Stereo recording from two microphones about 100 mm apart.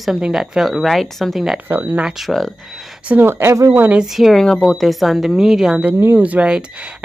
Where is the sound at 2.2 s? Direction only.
5° left (ahead or behind).